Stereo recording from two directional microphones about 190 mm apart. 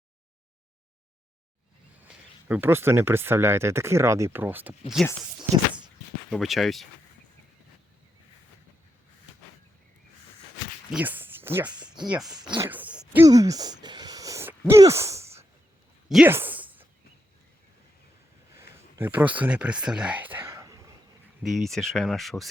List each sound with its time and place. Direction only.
2.0 s speech: 10° right (ahead or behind)
6.3 s speech: centre (ahead or behind)
10.9 s speech: 10° right (ahead or behind)
12.4 s speech: 20° right (ahead or behind)
12.7 s a sound: 5° right (ahead or behind)
13.2 s a sound: 20° right (ahead or behind)
16.0 s speech: centre (ahead or behind)
16.3 s a sound: 10° right (ahead or behind)
18.9 s speech: 10° right (ahead or behind)
21.4 s speech: centre (ahead or behind)